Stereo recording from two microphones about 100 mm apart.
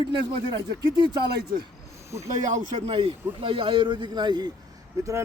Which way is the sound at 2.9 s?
70° right (ahead or behind).